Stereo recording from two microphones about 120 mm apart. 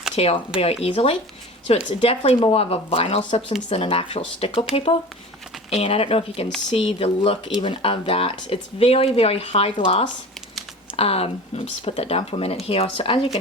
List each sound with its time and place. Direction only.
0.2 s speech: 55° left (ahead or behind)
5.7 s speech: 55° left (ahead or behind)